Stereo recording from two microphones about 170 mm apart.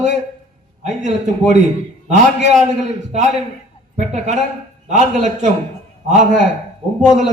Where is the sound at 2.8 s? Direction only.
45° right (ahead or behind).